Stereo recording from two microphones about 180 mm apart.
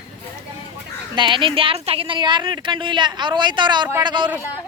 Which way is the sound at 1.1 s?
25° right (ahead or behind).